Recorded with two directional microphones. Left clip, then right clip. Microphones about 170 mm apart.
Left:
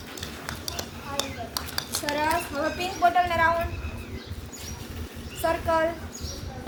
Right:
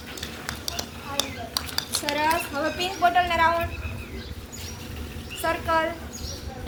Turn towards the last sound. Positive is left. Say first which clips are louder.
# even
turn(degrees=55)  # may be behind; listen again after turning